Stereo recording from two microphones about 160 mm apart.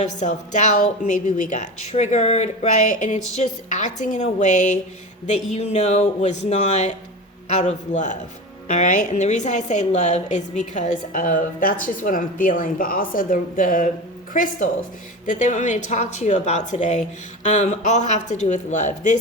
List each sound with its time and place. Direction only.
0.0 s a woman's voice: 50° left (ahead or behind)